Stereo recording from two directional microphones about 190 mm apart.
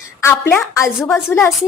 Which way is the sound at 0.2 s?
10° left (ahead or behind).